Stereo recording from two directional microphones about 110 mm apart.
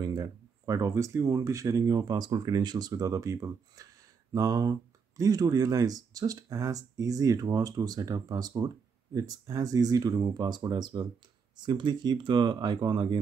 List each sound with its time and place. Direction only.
0.0 s speech: 35° right (ahead or behind)